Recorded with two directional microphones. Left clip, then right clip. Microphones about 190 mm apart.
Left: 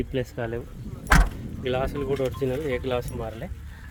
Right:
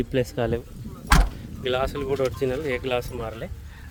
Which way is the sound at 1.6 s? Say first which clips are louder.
Right 2 dB; 15° right (ahead or behind).